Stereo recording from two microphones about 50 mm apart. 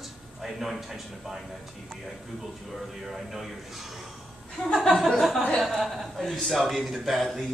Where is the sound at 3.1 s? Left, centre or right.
Centre.